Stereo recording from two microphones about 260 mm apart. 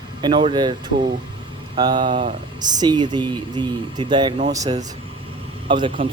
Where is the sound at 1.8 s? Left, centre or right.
Centre.